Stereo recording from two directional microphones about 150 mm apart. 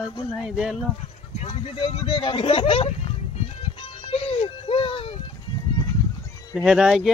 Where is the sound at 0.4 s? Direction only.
5° right (ahead or behind).